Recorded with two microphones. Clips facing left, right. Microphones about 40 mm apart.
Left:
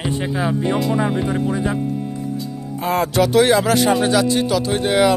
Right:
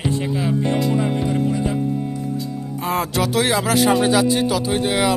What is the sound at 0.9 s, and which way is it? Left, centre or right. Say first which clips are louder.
Music: left 1 dB; centre.